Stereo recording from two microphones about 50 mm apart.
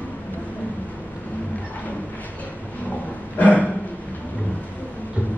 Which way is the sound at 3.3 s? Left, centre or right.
Left.